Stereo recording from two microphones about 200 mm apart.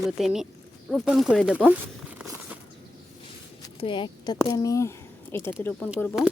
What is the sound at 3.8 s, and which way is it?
Speech, 25° left (ahead or behind).